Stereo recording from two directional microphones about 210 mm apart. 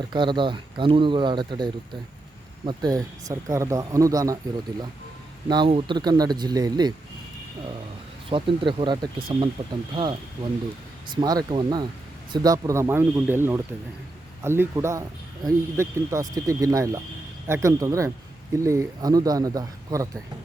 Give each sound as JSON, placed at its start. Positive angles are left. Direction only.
{"t": 0.1, "sound": "speech", "side_deg": -20}
{"t": 5.5, "sound": "speech", "side_deg": -20}
{"t": 8.3, "sound": "speech", "side_deg": -25}